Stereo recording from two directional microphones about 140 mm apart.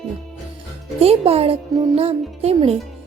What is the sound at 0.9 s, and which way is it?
A woman's voice, 45° right (ahead or behind).